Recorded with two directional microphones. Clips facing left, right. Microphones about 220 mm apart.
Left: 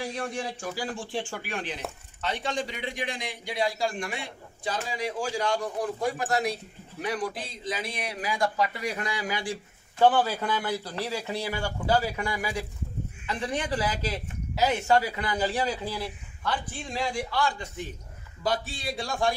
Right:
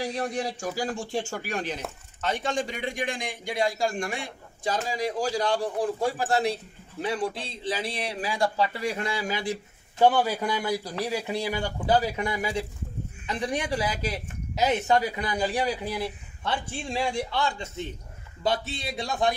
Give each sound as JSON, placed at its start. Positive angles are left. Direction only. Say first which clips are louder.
{"t": 0.0, "sound": "a man's voice", "louder": "right 3 dB", "side_deg": -35}